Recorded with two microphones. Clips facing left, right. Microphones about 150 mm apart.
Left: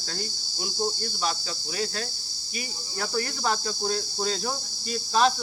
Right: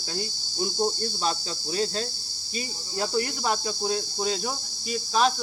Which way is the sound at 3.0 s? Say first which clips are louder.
Right 3 dB; 20° right (ahead or behind).